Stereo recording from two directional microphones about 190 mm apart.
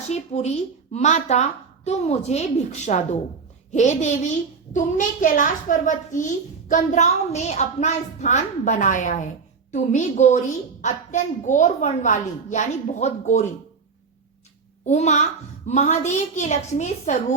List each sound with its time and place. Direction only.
0.1 s a child's voice: 35° left (ahead or behind)
14.8 s a child's voice: 35° left (ahead or behind)